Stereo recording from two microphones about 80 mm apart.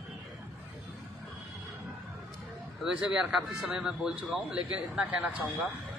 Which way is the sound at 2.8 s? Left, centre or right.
Centre.